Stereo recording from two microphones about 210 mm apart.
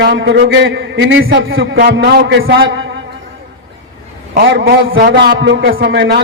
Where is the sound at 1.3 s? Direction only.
55° right (ahead or behind).